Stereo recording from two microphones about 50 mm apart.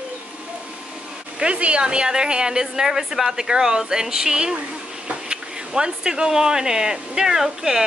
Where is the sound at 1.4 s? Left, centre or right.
Right.